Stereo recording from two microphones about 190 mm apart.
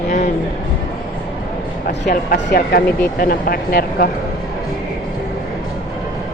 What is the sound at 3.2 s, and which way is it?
Speech, 50° left (ahead or behind).